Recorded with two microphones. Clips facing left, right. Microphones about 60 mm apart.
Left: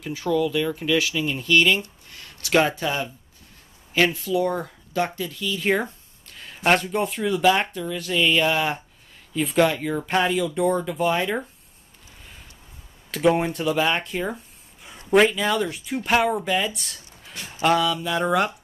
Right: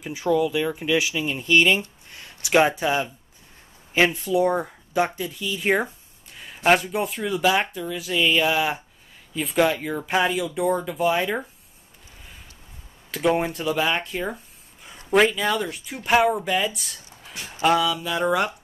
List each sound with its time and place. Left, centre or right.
0.0 s speech: centre
13.1 s speech: centre